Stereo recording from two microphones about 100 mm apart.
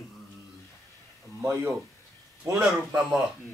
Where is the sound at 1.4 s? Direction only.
25° right (ahead or behind).